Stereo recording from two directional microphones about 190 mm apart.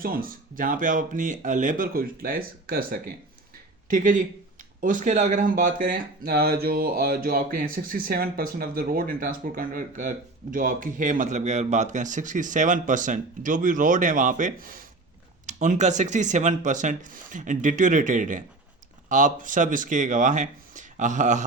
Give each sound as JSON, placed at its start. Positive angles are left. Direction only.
{"t": 0.0, "sound": "speech", "side_deg": -50}